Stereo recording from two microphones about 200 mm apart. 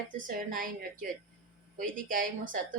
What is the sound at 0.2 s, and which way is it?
A woman's voice, 45° right (ahead or behind).